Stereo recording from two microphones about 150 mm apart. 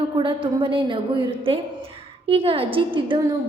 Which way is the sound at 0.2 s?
35° right (ahead or behind).